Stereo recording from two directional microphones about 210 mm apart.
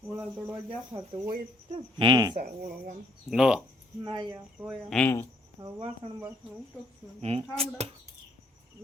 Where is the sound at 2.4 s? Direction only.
40° right (ahead or behind).